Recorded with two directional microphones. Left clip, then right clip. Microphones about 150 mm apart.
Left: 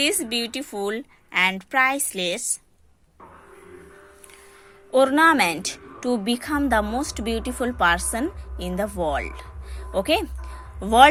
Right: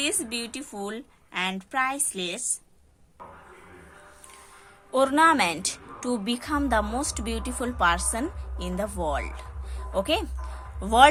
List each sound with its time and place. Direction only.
0.0 s a woman's voice: 35° left (ahead or behind)
4.9 s a woman's voice: 15° left (ahead or behind)